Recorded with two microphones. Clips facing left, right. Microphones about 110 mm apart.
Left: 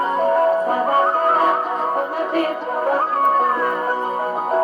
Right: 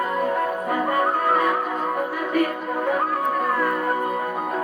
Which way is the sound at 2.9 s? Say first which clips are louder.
Left 6 dB; 30° left (ahead or behind).